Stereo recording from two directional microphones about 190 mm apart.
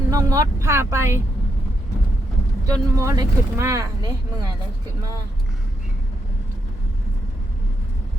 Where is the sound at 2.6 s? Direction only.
15° right (ahead or behind).